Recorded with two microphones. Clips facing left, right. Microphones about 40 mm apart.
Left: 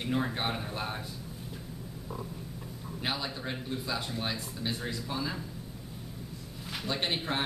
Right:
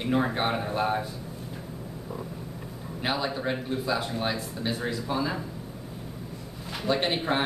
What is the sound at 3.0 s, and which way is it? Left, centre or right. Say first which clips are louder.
A man's voice: right 7 dB; centre.